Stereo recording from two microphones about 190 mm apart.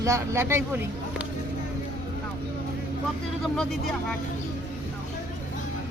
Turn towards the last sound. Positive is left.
turn(degrees=5)  # may be behind; listen again after turning